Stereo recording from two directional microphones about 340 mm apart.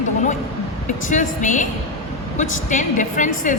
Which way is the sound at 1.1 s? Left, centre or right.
Left.